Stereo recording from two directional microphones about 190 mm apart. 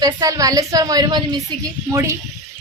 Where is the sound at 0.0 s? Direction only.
20° right (ahead or behind).